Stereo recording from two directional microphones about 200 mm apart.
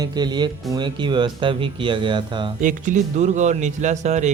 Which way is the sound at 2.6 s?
40° right (ahead or behind).